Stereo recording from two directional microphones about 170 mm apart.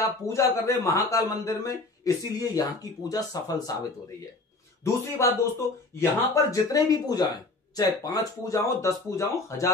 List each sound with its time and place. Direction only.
0.0 s speech: 15° left (ahead or behind)
4.8 s speech: 15° left (ahead or behind)